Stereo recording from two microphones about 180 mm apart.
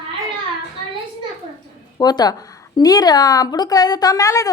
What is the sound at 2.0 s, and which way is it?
A woman's voice, 20° left (ahead or behind).